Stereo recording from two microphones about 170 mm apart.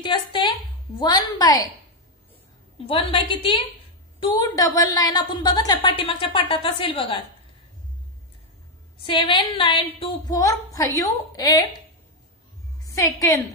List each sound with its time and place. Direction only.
0.0 s a woman's voice: 30° left (ahead or behind)
2.9 s a woman's voice: 30° left (ahead or behind)
9.0 s a woman's voice: 30° left (ahead or behind)
10.3 s a woman's voice: 20° left (ahead or behind)
12.8 s a woman's voice: 20° left (ahead or behind)